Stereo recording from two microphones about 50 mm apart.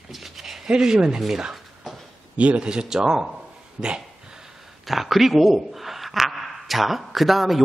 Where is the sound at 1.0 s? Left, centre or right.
Centre.